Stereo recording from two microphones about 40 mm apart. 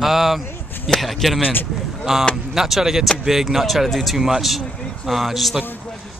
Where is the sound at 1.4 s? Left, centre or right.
Left.